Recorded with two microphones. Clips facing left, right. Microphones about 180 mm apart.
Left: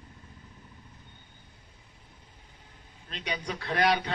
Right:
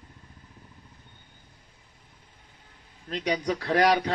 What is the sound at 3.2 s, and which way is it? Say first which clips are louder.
Speech: right 8 dB; 35° right (ahead or behind).